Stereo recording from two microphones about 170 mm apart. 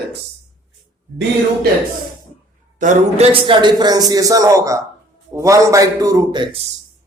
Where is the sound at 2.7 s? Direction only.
45° right (ahead or behind).